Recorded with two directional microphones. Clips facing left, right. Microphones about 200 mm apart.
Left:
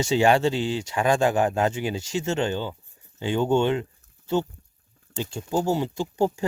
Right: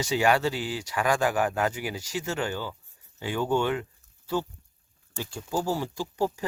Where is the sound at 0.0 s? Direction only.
25° left (ahead or behind).